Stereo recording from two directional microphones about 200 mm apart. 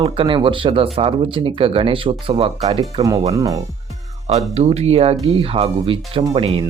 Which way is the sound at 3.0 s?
15° right (ahead or behind).